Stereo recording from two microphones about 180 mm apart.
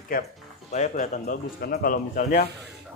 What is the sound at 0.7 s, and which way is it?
Speech, 40° left (ahead or behind).